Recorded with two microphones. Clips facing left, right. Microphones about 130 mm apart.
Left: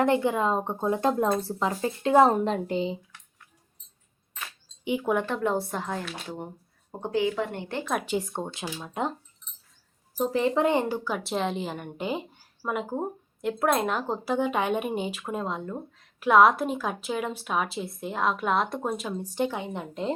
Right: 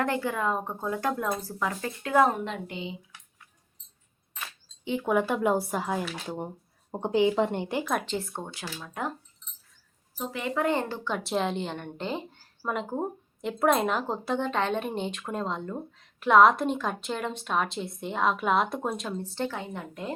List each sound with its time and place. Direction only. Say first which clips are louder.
0.0 s speech: left 5 dB; 20° left (ahead or behind); by 3.0 s 35° left (ahead or behind)
5.0 s speech: right 3 dB; 5° right (ahead or behind)
8.0 s speech: left 4 dB; 15° left (ahead or behind)
10.2 s a woman's voice: left 6 dB; 30° left (ahead or behind)